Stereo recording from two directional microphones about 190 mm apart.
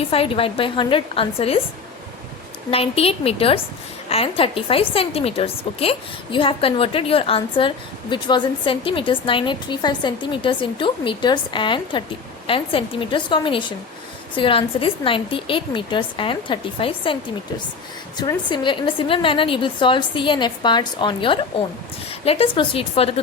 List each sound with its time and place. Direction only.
0.1 s a woman's voice: 30° left (ahead or behind)
2.6 s a woman's voice: 30° left (ahead or behind)
18.2 s a woman's voice: 25° left (ahead or behind)